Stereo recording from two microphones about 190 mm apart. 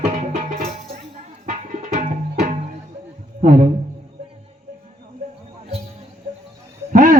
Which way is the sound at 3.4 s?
40° right (ahead or behind).